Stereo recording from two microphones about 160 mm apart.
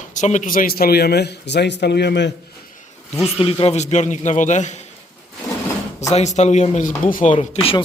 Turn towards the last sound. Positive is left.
turn(degrees=35)  # may be behind; listen again after turning